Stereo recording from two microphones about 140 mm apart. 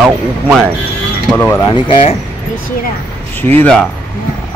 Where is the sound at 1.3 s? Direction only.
15° left (ahead or behind).